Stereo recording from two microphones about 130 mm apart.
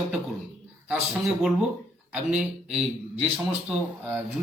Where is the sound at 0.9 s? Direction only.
5° right (ahead or behind).